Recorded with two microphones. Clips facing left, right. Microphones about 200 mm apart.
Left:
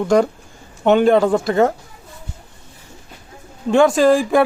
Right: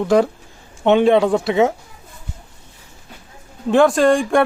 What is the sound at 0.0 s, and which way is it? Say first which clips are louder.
A man's voice: even; centre (ahead or behind).